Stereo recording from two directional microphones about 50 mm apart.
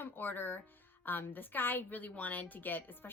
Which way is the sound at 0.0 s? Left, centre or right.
Left.